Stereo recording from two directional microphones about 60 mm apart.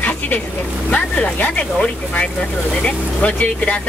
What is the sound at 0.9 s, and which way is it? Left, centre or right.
Speech, left.